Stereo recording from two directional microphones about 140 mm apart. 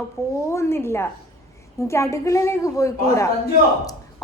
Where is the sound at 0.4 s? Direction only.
20° left (ahead or behind).